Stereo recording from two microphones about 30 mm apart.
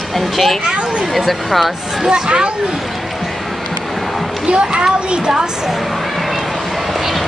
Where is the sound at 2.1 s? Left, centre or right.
Right.